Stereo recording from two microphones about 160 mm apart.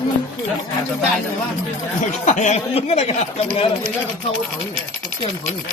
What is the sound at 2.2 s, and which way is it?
Speech, 50° left (ahead or behind).